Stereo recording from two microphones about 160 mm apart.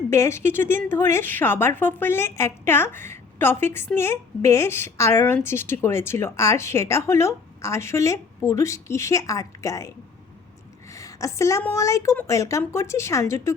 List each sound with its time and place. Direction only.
0.1 s speech: 15° left (ahead or behind)
10.9 s a woman's voice: 20° left (ahead or behind)